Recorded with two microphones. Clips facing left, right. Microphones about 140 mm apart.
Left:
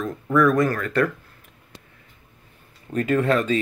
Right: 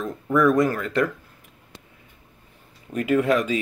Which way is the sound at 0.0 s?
20° right (ahead or behind).